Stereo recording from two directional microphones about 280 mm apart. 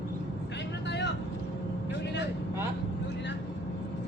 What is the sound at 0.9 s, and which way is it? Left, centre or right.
Vehicle, left.